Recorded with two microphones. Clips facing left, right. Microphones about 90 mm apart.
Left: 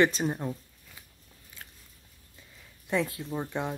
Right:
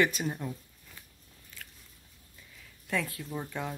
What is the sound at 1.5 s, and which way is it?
Biting, 15° left (ahead or behind).